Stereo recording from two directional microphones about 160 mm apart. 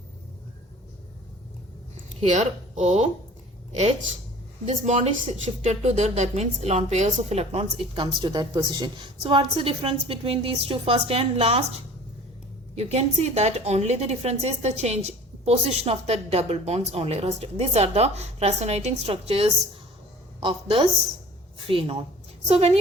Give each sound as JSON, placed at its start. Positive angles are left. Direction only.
{"t": 2.3, "sound": "speech", "side_deg": -45}
{"t": 4.6, "sound": "a woman's voice", "side_deg": -45}
{"t": 12.7, "sound": "a woman's voice", "side_deg": -40}